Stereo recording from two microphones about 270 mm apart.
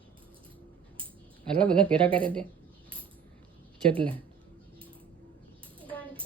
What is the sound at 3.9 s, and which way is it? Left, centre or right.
Speech, centre.